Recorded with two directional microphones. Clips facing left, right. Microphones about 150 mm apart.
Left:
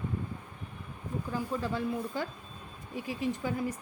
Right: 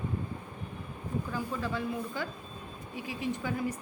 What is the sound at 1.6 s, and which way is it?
A woman's voice, 35° left (ahead or behind).